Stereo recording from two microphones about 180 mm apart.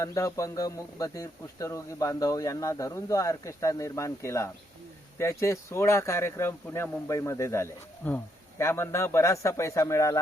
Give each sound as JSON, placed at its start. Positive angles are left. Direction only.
{"t": 0.0, "sound": "speech", "side_deg": 20}